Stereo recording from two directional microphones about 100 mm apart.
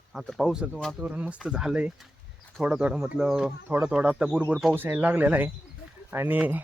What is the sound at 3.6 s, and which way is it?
Speech, 20° right (ahead or behind).